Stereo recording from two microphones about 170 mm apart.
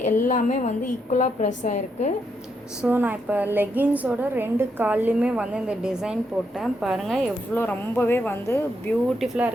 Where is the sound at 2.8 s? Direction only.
10° right (ahead or behind).